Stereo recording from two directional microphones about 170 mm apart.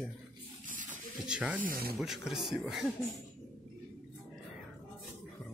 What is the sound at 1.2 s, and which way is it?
Snake, 5° right (ahead or behind).